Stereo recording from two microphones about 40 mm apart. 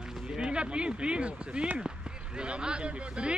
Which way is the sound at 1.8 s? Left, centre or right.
Right.